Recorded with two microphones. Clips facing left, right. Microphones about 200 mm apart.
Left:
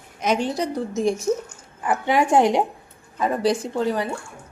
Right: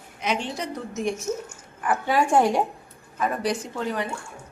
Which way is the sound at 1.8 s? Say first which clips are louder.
Left 2 dB; 20° left (ahead or behind).